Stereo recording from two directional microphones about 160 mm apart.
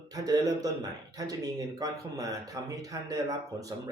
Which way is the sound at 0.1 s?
25° right (ahead or behind).